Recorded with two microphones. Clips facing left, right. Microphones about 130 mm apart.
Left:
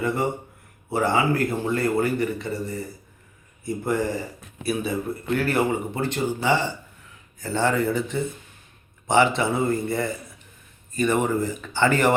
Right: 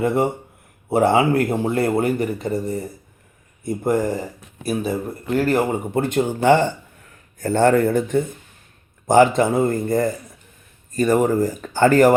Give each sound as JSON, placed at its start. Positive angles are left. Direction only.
{"t": 0.9, "sound": "speech", "side_deg": -55}